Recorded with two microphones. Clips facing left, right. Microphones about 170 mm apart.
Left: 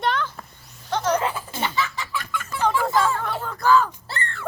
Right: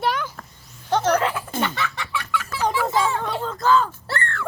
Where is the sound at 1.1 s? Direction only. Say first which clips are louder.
Right 2 dB; 70° right (ahead or behind).